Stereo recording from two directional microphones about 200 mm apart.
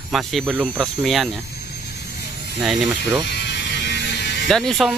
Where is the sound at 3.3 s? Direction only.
60° left (ahead or behind).